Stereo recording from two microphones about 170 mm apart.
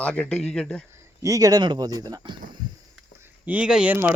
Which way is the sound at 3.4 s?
10° right (ahead or behind).